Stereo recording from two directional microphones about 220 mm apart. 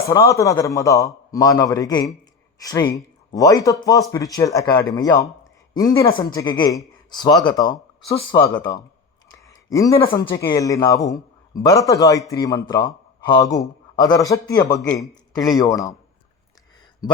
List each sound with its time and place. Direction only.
0.0 s a man's voice: 15° left (ahead or behind)